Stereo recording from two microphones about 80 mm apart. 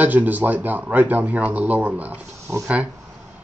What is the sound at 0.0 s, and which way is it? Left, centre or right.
A man's voice, right.